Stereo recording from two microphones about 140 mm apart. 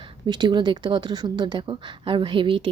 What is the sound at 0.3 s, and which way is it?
A woman's voice, 35° right (ahead or behind).